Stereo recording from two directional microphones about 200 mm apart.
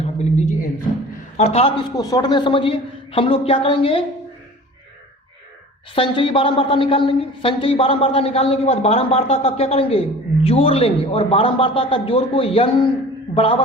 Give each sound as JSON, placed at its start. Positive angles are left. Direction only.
{"t": 0.0, "sound": "music", "side_deg": 35}
{"t": 1.4, "sound": "a man's voice", "side_deg": 30}
{"t": 2.0, "sound": "speech", "side_deg": 20}
{"t": 5.9, "sound": "speech", "side_deg": 25}